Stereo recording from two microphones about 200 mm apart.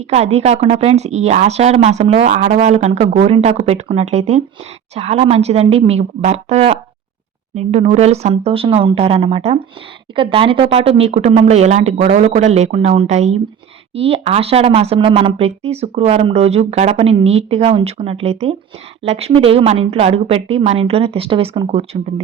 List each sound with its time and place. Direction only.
0.0 s a woman's voice: 30° right (ahead or behind)